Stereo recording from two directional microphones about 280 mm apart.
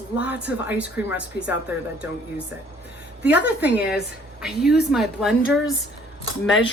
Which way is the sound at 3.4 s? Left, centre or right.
Left.